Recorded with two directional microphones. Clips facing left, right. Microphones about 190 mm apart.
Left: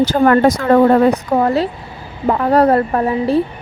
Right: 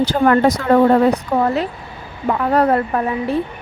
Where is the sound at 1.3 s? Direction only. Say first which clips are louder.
Left 3 dB; 35° left (ahead or behind).